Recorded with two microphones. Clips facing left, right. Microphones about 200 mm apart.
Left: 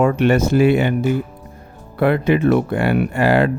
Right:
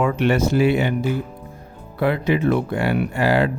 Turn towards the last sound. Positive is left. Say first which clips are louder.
# left 3 dB
turn(degrees=55)  # may be behind; listen again after turning